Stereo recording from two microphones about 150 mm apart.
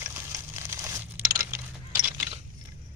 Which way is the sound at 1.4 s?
20° right (ahead or behind).